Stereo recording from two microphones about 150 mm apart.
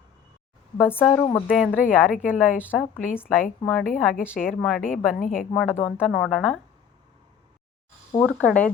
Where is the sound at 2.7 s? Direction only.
10° left (ahead or behind).